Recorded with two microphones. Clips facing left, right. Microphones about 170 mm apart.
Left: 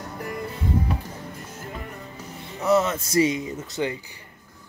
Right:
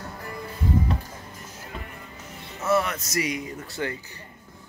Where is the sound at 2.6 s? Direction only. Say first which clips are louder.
Left 3 dB; 20° left (ahead or behind).